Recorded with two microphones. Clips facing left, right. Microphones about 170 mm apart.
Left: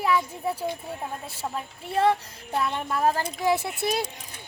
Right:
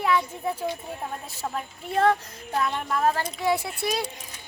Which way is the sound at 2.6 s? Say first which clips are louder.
Even; 10° left (ahead or behind).